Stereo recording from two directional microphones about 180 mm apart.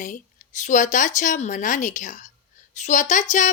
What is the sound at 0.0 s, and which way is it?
Speech, 45° left (ahead or behind).